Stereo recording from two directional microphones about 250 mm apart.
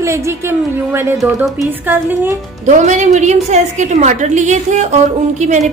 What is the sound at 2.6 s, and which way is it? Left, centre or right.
A woman's voice, right.